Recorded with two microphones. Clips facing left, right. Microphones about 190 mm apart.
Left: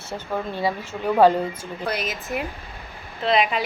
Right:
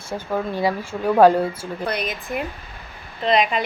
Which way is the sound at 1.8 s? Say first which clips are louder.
Right 1 dB; 5° left (ahead or behind).